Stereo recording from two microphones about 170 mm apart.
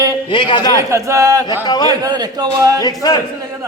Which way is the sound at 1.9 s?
25° right (ahead or behind).